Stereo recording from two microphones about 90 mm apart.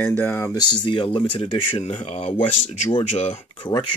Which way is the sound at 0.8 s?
70° left (ahead or behind).